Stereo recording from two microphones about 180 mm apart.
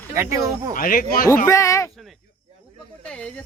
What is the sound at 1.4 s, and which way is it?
Speech, 15° left (ahead or behind).